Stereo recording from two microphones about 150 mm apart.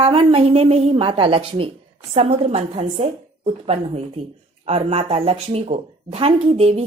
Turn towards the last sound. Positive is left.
turn(degrees=-45)  # may be behind; listen again after turning